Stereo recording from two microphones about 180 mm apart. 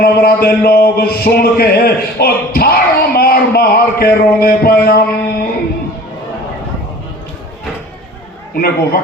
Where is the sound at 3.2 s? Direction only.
60° left (ahead or behind).